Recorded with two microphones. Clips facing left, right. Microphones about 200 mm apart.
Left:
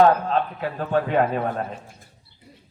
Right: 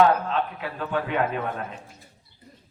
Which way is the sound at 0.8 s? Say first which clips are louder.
Left 5 dB; 40° left (ahead or behind).